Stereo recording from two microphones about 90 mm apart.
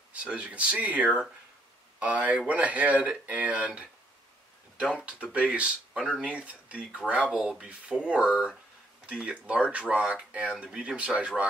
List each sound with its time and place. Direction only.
0.1 s speech: 15° right (ahead or behind)